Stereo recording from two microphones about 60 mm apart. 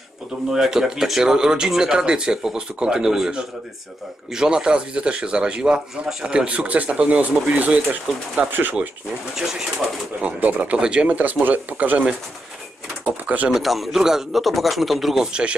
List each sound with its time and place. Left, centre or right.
0.5 s speech: centre; by 8.7 s right
9.3 s speech: centre
10.2 s speech: right
13.0 s bird: right
13.5 s speech: centre